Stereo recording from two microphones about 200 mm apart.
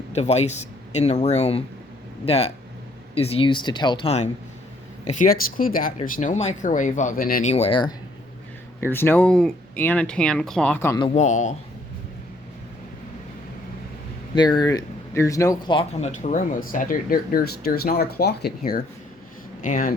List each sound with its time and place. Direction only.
0.1 s speech: 35° left (ahead or behind)
7.5 s speech: 30° left (ahead or behind)
8.8 s speech: 10° left (ahead or behind)
11.0 s speech: 35° left (ahead or behind)
14.3 s speech: 20° left (ahead or behind); by 19.9 s 40° left (ahead or behind)